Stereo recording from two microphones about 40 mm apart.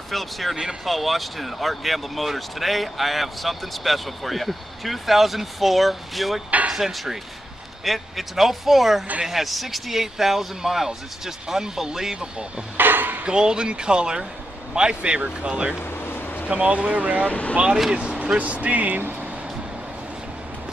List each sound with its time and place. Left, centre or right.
0.1 s speech: centre
12.2 s speech: right
12.7 s dishes: right
13.2 s speech: centre
15.8 s a sound: left
16.4 s speech: right
17.3 s speech: left
18.2 s speech: right